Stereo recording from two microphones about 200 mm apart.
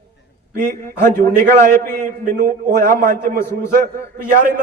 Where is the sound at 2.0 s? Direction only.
40° right (ahead or behind).